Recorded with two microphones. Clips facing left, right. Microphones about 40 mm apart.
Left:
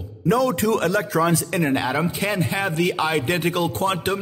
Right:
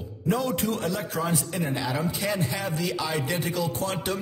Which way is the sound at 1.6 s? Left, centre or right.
Left.